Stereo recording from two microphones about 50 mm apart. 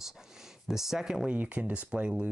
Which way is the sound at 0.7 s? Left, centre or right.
Centre.